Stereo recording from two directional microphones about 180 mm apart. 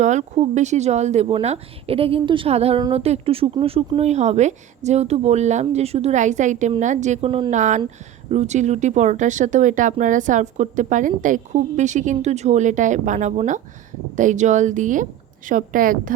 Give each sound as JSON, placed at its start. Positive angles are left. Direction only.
{"t": 0.0, "sound": "speech", "side_deg": -40}